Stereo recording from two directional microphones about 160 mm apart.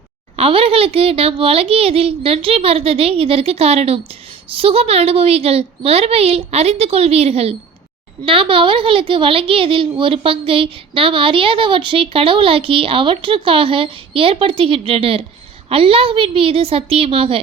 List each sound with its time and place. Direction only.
0.3 s a child's voice: 35° right (ahead or behind)